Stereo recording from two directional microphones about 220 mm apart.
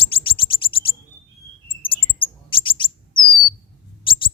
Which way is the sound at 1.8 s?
25° left (ahead or behind).